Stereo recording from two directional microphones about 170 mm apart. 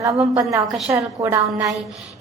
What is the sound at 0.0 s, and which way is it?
A woman's voice, 20° right (ahead or behind).